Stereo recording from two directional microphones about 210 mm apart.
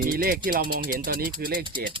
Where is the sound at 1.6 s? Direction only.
25° right (ahead or behind).